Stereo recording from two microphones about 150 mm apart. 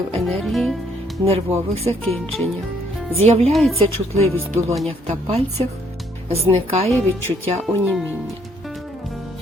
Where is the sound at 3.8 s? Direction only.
40° right (ahead or behind).